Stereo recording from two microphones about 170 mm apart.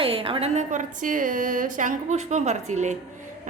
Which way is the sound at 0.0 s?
35° right (ahead or behind).